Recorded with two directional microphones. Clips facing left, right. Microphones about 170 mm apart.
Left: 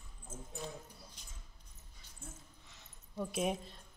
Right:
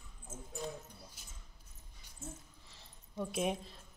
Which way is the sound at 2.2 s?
30° right (ahead or behind).